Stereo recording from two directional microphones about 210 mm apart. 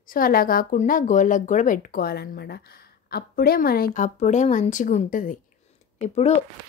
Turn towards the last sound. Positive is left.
turn(degrees=30)  # may be behind; listen again after turning